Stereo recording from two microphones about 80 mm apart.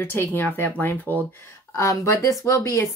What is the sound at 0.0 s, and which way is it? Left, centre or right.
Speech, left.